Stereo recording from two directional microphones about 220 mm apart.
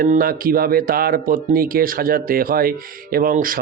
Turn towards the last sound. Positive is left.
turn(degrees=-40)  # may be behind; listen again after turning